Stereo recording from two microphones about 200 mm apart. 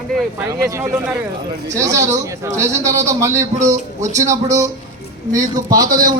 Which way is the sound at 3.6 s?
35° right (ahead or behind).